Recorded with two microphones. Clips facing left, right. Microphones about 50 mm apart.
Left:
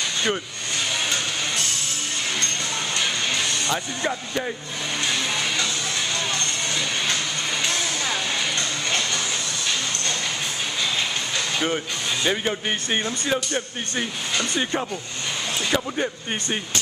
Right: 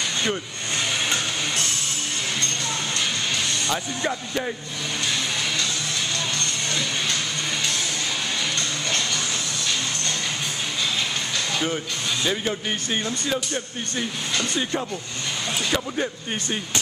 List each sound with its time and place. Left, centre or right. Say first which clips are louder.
3.6 s speech: even; centre
11.3 s music: left 2 dB; centre
12.3 s speech: left 3 dB; centre